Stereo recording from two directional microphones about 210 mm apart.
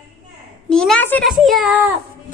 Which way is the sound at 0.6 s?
5° left (ahead or behind).